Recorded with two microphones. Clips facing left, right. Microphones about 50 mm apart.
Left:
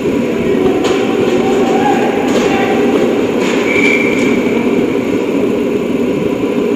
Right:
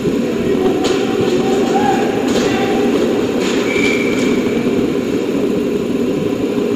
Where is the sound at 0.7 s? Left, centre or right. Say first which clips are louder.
Left 3 dB; left.